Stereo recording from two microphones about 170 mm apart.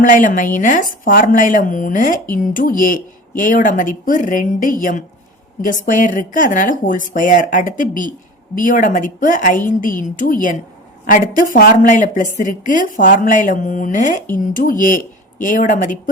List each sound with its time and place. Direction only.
0.0 s a woman's voice: 50° left (ahead or behind)